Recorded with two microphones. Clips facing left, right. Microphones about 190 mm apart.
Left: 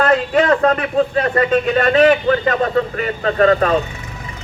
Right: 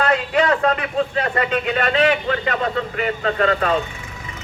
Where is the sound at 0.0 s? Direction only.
45° left (ahead or behind).